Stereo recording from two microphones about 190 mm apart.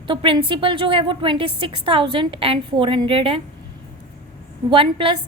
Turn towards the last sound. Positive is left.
turn(degrees=-25)  # may be behind; listen again after turning